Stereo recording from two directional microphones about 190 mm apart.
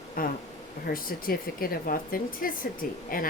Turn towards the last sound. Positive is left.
turn(degrees=50)  # may be behind; listen again after turning